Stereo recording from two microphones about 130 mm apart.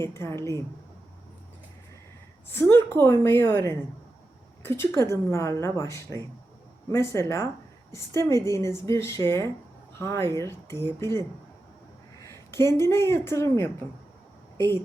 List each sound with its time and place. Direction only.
0.0 s a woman's voice: 20° left (ahead or behind)
2.5 s a woman's voice: 15° left (ahead or behind)